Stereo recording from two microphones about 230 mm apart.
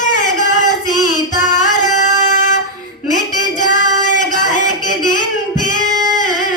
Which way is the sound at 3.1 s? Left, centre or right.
Left.